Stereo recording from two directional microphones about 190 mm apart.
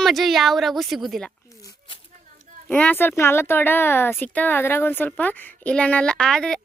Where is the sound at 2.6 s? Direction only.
5° left (ahead or behind).